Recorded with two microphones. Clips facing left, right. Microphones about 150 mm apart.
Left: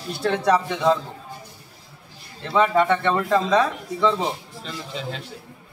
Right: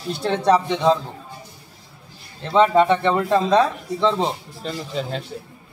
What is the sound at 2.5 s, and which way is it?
Speech, 25° right (ahead or behind).